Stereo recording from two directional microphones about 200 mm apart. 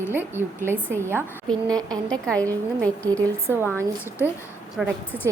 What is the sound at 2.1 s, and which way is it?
A woman's voice, 5° left (ahead or behind).